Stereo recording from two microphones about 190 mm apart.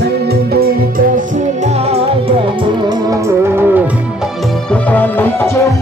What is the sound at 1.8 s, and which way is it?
Music, 30° right (ahead or behind).